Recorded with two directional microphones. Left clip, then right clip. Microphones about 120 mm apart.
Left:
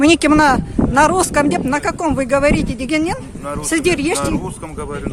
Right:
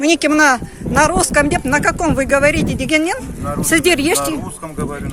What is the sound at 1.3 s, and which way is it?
Speech, 20° left (ahead or behind).